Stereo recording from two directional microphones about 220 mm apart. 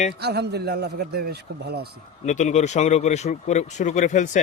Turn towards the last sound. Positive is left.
turn(degrees=35)  # may be behind; listen again after turning